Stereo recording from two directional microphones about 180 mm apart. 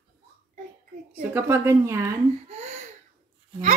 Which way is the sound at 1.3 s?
15° right (ahead or behind).